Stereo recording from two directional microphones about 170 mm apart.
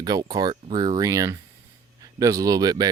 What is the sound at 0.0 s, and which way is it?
Speech, 25° right (ahead or behind).